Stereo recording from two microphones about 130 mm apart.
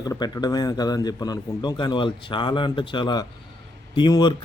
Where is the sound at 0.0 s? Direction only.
30° left (ahead or behind).